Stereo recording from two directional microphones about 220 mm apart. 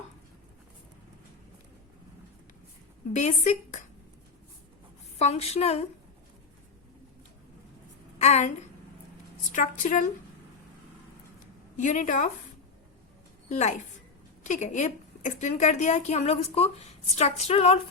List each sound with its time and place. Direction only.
3.2 s a woman's voice: 30° left (ahead or behind)
5.2 s a woman's voice: 30° left (ahead or behind)
8.2 s a woman's voice: 30° left (ahead or behind)
11.8 s a woman's voice: 35° left (ahead or behind)
13.5 s a woman's voice: 30° left (ahead or behind)